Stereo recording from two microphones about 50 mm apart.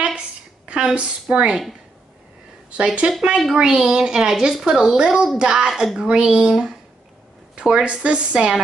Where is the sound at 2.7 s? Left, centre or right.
Right.